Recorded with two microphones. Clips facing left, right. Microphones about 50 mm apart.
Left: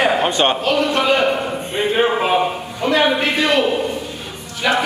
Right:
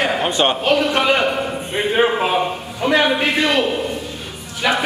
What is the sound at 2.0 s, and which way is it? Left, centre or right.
Speech, centre.